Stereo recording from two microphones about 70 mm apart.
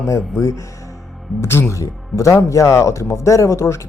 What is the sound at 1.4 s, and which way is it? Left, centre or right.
Speech, left.